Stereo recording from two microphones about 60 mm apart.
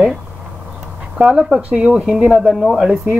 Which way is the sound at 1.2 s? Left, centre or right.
Centre.